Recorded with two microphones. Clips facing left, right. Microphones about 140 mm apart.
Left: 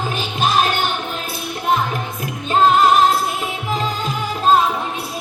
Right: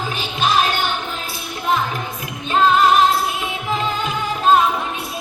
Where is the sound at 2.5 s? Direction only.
40° left (ahead or behind).